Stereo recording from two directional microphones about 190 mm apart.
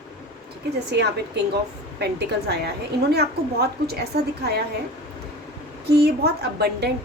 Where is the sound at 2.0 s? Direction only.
60° right (ahead or behind).